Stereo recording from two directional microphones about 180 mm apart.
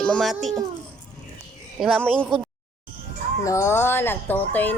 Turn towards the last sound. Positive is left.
turn(degrees=10)  # may be behind; listen again after turning